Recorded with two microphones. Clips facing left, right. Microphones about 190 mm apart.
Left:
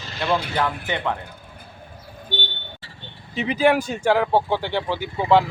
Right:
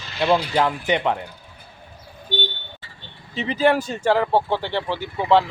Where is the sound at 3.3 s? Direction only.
10° left (ahead or behind).